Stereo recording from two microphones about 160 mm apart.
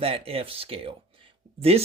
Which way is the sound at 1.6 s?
40° right (ahead or behind).